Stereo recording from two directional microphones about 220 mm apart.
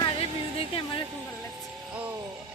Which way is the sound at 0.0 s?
25° left (ahead or behind).